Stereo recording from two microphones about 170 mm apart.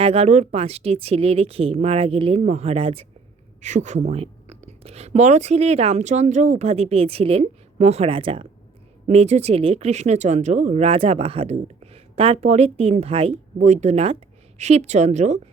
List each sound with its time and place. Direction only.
0.0 s speech: 35° right (ahead or behind)